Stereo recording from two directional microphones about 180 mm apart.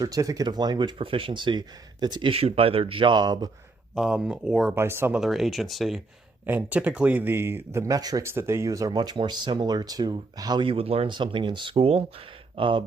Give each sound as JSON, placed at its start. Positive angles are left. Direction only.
{"t": 0.0, "sound": "speech", "side_deg": -20}
{"t": 3.9, "sound": "speech", "side_deg": -5}
{"t": 4.7, "sound": "speech", "side_deg": -15}